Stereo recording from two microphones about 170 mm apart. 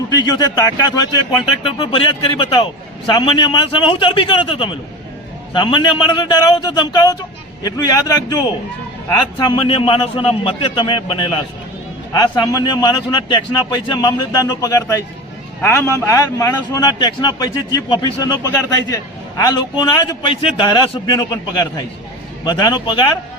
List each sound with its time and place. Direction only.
0.1 s a man's voice: 25° left (ahead or behind)